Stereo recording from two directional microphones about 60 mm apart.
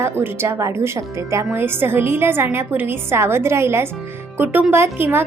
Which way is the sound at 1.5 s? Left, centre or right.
Right.